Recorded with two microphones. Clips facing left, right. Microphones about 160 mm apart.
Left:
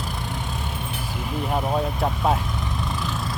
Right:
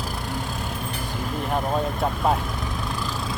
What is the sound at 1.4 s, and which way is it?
Speech, 5° left (ahead or behind).